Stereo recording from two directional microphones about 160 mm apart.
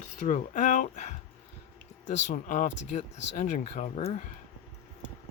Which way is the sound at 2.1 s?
90° left.